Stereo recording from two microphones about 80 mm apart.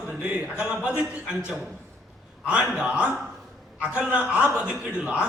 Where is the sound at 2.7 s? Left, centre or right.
Centre.